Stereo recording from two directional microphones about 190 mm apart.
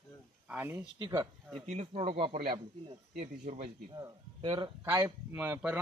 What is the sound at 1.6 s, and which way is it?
Speech, 35° right (ahead or behind).